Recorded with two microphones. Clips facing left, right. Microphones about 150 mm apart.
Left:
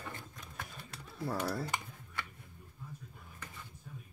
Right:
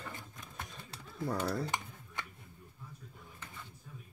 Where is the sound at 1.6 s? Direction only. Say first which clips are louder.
Right 1 dB; 20° right (ahead or behind).